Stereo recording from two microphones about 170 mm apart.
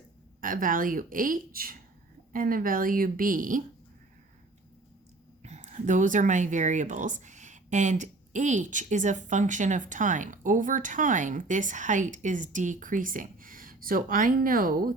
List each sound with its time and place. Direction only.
0.4 s speech: 55° right (ahead or behind)
5.4 s speech: 40° right (ahead or behind)